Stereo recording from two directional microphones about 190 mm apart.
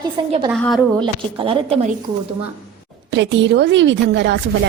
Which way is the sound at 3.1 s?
70° right (ahead or behind).